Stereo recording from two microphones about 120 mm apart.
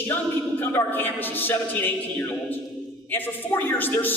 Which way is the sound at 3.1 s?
15° left (ahead or behind).